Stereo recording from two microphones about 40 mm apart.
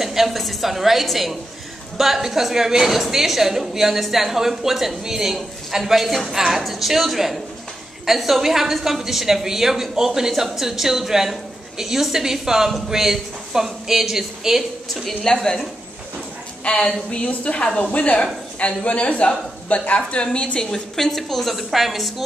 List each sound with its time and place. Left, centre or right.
0.0 s a woman's voice: centre
15.3 s a woman's voice: centre
16.6 s a woman's voice: left
20.7 s a woman's voice: centre